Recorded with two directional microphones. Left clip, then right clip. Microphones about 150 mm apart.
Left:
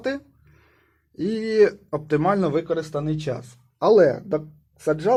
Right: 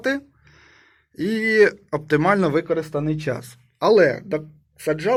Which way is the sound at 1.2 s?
10° right (ahead or behind).